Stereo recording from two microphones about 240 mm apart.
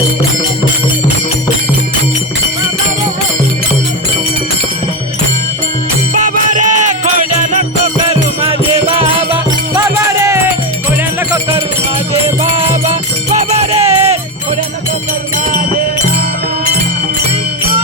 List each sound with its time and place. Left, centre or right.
6.2 s music: right; by 10.4 s centre
12.9 s music: right